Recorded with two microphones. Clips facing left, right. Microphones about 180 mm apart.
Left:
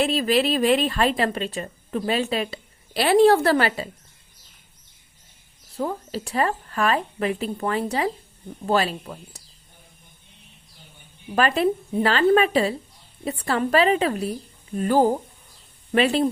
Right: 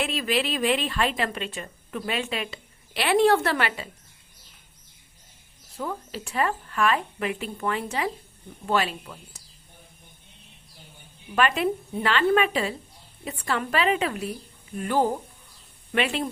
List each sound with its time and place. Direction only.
0.0 s a woman's voice: 35° left (ahead or behind)
5.7 s a woman's voice: 35° left (ahead or behind)
11.3 s a woman's voice: 35° left (ahead or behind)